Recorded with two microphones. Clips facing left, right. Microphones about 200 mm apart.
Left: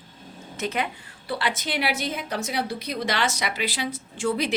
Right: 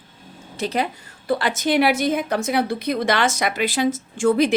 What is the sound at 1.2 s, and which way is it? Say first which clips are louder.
A woman's voice: right 8 dB; 45° right (ahead or behind).